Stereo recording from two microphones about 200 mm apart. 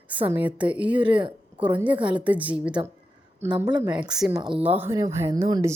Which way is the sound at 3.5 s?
20° right (ahead or behind).